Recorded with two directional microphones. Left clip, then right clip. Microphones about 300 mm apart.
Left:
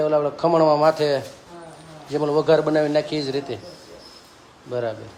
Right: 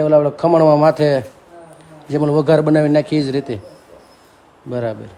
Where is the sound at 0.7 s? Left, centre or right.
Centre.